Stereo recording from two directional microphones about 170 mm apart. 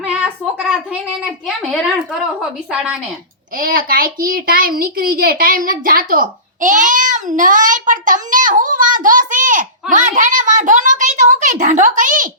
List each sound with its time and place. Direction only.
0.0 s a sound: 5° right (ahead or behind)
1.2 s a woman's voice: centre (ahead or behind)
3.6 s a child's voice: 60° right (ahead or behind)